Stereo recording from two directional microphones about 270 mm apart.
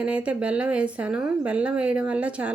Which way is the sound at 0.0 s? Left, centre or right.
Centre.